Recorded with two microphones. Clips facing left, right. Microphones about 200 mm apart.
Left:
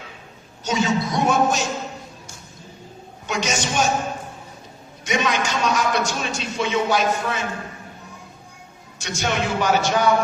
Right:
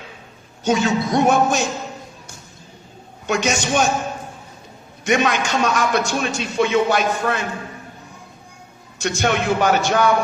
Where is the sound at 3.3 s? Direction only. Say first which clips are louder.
Right 5 dB; 55° right (ahead or behind).